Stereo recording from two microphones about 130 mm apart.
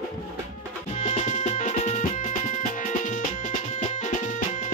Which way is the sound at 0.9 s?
60° left (ahead or behind).